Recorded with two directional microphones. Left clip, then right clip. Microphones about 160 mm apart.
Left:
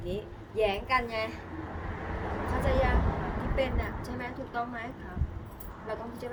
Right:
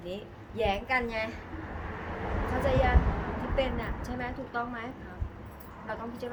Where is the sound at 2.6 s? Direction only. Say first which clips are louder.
Right 2 dB; 15° right (ahead or behind).